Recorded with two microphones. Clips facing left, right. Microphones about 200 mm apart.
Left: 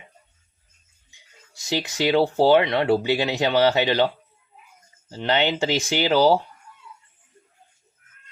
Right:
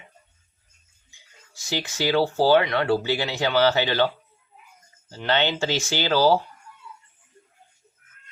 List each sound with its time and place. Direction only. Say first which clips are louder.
1.7 s speech: left 2 dB; 20° left (ahead or behind)
5.1 s speech: left 2 dB; 15° left (ahead or behind)